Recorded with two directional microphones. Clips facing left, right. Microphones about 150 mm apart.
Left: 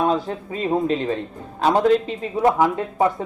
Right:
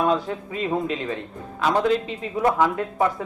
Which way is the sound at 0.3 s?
35° left (ahead or behind).